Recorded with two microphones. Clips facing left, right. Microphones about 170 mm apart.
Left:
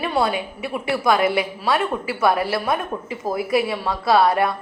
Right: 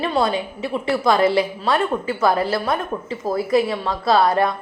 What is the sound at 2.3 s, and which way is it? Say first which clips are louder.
Speech: even; 25° right (ahead or behind).